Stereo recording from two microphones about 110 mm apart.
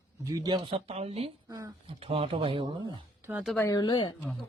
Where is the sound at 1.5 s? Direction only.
35° right (ahead or behind).